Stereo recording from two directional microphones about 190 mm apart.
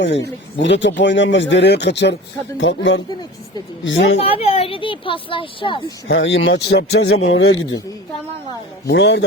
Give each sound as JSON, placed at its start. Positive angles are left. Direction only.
{"t": 0.0, "sound": "speech", "side_deg": 65}
{"t": 2.6, "sound": "speech", "side_deg": 75}
{"t": 4.2, "sound": "a woman's voice", "side_deg": 30}
{"t": 6.1, "sound": "speech", "side_deg": 75}
{"t": 8.9, "sound": "a man's voice", "side_deg": 65}